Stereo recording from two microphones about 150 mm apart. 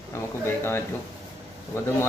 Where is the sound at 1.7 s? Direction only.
15° left (ahead or behind).